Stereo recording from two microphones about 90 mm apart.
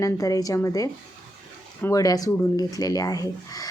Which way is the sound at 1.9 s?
40° left (ahead or behind).